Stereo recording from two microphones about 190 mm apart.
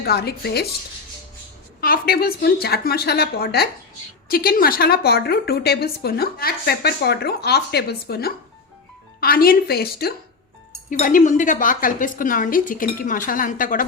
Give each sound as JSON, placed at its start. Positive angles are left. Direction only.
{"t": 0.0, "sound": "a woman's voice", "side_deg": 55}
{"t": 1.8, "sound": "a woman's voice", "side_deg": 50}
{"t": 10.8, "sound": "speech", "side_deg": 45}